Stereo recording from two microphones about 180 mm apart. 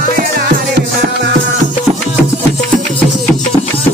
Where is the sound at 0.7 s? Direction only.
65° right (ahead or behind).